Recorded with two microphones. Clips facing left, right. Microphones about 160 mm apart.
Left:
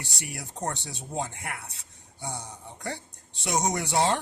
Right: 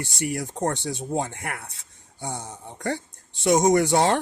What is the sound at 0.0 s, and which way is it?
Speech, 50° right (ahead or behind).